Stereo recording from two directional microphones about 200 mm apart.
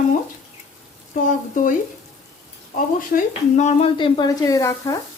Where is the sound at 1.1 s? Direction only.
40° left (ahead or behind).